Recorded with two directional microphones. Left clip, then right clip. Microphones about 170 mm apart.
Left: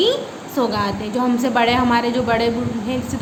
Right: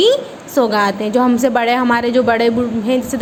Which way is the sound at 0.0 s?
40° right (ahead or behind).